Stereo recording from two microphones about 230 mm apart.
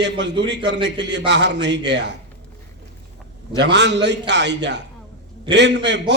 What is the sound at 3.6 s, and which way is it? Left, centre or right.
Speech, right.